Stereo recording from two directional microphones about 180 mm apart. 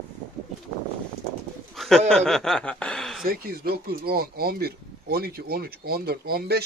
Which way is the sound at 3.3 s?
55° right (ahead or behind).